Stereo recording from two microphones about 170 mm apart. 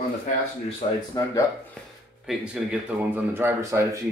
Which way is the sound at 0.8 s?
35° left (ahead or behind).